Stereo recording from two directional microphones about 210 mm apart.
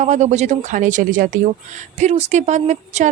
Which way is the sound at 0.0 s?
35° right (ahead or behind).